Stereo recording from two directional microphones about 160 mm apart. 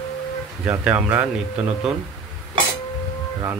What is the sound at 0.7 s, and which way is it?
Speech, 10° right (ahead or behind).